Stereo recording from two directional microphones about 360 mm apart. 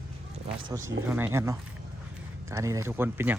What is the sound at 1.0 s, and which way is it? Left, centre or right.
Speech, centre.